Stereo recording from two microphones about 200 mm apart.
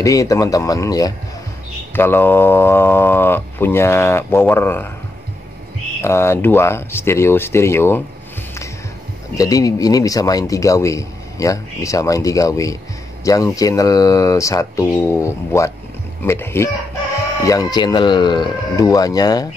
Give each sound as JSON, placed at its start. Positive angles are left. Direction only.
{"t": 0.0, "sound": "a man's voice", "side_deg": 15}
{"t": 6.0, "sound": "a man's voice", "side_deg": 15}
{"t": 9.4, "sound": "a man's voice", "side_deg": 15}